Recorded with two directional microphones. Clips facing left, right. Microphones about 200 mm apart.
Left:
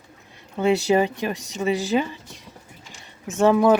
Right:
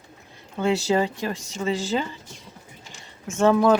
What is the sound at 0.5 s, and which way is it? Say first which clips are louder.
Speech: left 3 dB; 15° left (ahead or behind).